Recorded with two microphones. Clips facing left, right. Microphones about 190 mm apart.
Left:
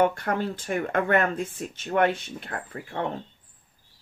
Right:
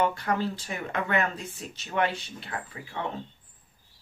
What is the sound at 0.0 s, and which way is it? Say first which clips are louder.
Speech: left 3 dB; 55° left (ahead or behind).